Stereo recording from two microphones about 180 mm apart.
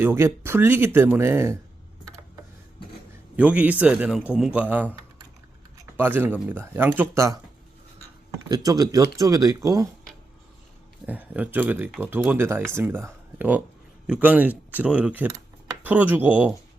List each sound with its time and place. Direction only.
0.0 s speech: 15° right (ahead or behind)
3.3 s speech: 5° right (ahead or behind)
8.4 s speech: 20° right (ahead or behind)
11.0 s speech: 10° right (ahead or behind)